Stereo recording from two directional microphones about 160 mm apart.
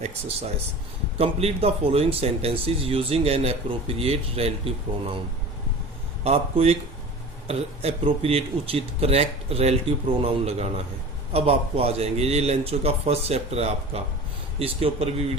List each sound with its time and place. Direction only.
0.0 s speech: 40° right (ahead or behind)
6.2 s speech: 40° right (ahead or behind)